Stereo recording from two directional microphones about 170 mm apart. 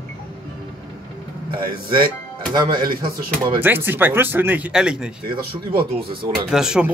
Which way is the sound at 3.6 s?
10° right (ahead or behind).